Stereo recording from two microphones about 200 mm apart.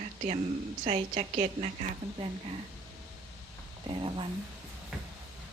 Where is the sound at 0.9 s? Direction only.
35° right (ahead or behind).